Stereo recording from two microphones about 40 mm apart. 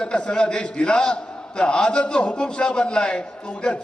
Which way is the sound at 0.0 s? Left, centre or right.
Left.